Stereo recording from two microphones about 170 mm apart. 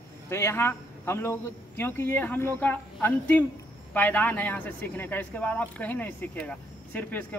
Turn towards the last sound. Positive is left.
turn(degrees=10)  # may be behind; listen again after turning